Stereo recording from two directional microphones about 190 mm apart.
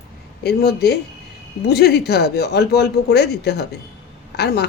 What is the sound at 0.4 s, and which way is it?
Speech, 60° left (ahead or behind).